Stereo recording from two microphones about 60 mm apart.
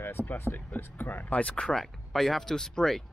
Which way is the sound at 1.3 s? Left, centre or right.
Left.